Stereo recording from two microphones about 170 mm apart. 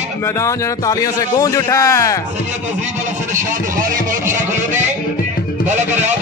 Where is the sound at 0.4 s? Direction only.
20° left (ahead or behind).